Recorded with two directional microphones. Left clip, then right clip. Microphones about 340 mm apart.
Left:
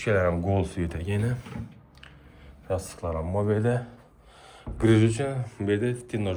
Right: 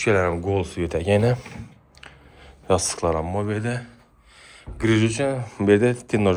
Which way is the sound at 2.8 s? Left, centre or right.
Centre.